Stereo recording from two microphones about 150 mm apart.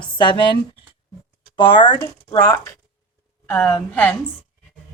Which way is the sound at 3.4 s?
10° left (ahead or behind).